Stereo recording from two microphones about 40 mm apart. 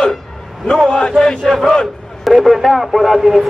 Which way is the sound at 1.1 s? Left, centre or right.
Centre.